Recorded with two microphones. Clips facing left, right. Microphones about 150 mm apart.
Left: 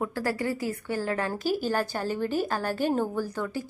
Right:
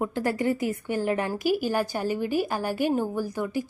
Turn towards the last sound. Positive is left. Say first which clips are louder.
# right 2 dB
turn(degrees=-15)  # may be behind; listen again after turning